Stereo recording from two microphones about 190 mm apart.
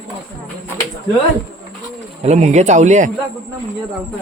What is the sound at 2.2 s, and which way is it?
Speech, 35° right (ahead or behind).